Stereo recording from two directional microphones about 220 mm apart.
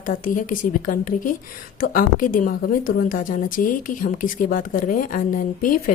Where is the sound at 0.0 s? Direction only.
35° left (ahead or behind).